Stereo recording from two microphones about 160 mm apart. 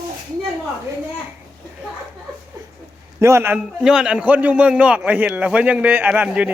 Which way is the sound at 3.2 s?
15° right (ahead or behind).